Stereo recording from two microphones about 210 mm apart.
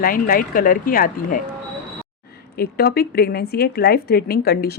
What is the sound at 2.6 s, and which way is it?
Speech, 45° left (ahead or behind).